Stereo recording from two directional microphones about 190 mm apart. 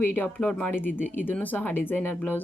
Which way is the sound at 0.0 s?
10° left (ahead or behind).